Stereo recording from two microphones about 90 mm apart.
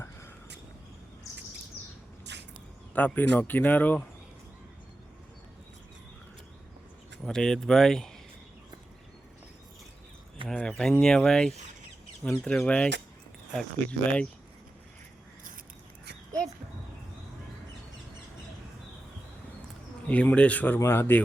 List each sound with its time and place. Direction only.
2.9 s speech: 20° left (ahead or behind)
7.3 s speech: 10° left (ahead or behind)
10.5 s speech: 10° left (ahead or behind)
20.1 s speech: 15° left (ahead or behind)
20.7 s speech: 30° left (ahead or behind)